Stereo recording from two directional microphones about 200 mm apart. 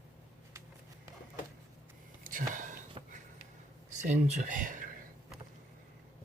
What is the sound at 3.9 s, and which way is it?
Speech, 35° right (ahead or behind).